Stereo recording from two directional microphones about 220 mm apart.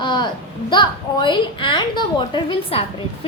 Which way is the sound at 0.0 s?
20° left (ahead or behind).